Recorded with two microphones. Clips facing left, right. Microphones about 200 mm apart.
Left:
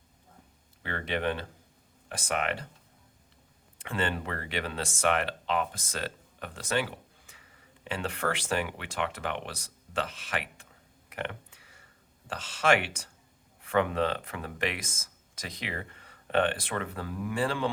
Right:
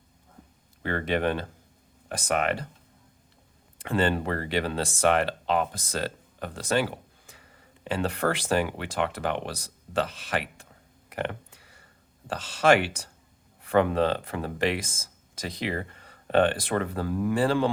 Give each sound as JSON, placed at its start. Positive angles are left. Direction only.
{"t": 0.8, "sound": "speech", "side_deg": -45}
{"t": 3.8, "sound": "speech", "side_deg": -35}
{"t": 11.1, "sound": "a sound", "side_deg": -35}
{"t": 12.3, "sound": "speech", "side_deg": -35}